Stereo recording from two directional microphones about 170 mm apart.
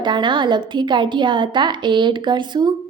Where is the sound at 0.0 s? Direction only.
25° right (ahead or behind).